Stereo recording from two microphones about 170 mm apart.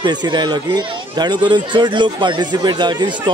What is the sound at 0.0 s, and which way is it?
Speech, 25° right (ahead or behind).